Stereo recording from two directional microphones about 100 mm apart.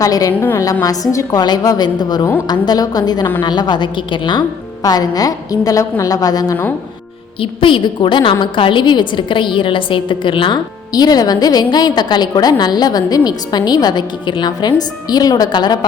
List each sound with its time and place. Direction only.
0.0 s a woman's voice: 35° left (ahead or behind)
0.3 s a woman's voice: 20° left (ahead or behind)
0.6 s a woman's voice: 35° left (ahead or behind)
7.4 s a woman's voice: 60° left (ahead or behind)